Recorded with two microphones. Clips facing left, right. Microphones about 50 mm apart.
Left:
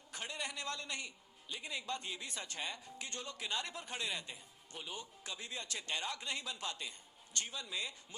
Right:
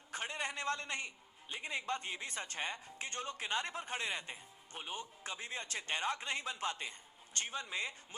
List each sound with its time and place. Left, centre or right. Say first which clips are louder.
0.1 s a man's voice: right 3 dB; right